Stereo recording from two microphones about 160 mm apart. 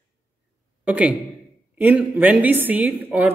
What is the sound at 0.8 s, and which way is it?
A man's voice, 10° right (ahead or behind).